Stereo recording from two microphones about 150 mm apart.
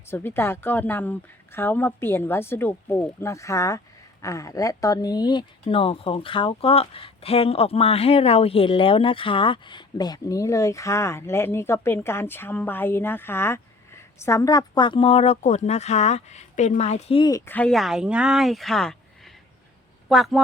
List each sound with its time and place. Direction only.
0.1 s speech: 15° left (ahead or behind); by 17.2 s 45° left (ahead or behind)
17.2 s speech: 20° left (ahead or behind)
17.5 s speech: 5° left (ahead or behind)